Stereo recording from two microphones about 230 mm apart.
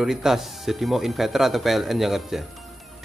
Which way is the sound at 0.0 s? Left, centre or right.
Centre.